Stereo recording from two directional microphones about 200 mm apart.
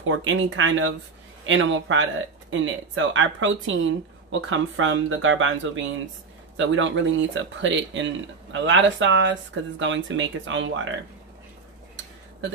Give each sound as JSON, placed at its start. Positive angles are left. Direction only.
{"t": 0.0, "sound": "speech", "side_deg": -80}